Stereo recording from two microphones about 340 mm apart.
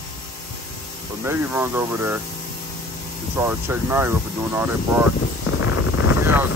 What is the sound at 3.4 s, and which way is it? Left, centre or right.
Speech, centre.